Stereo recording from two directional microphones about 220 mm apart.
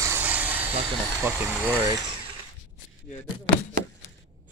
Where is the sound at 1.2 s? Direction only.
10° right (ahead or behind).